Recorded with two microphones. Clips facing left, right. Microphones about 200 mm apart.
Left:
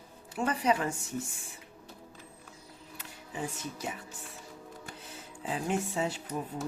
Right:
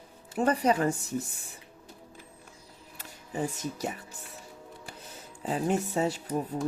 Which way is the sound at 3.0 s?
40° right (ahead or behind).